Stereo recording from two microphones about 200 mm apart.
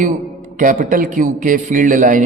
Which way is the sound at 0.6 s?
40° right (ahead or behind).